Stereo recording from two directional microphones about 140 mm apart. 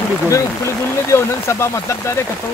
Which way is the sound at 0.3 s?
20° left (ahead or behind).